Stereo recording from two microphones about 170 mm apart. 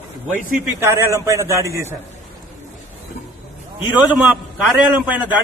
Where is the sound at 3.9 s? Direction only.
10° right (ahead or behind).